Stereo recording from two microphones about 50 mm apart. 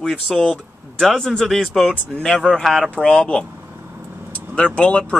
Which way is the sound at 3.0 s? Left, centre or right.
Centre.